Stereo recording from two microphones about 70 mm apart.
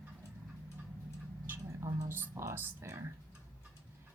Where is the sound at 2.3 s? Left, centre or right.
Right.